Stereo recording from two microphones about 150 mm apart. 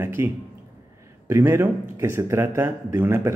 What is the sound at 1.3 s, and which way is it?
A man's voice, 20° right (ahead or behind).